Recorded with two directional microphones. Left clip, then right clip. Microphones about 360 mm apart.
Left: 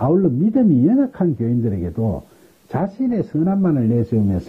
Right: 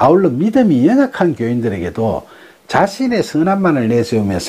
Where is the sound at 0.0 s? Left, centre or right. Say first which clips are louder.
Right 7 dB; centre.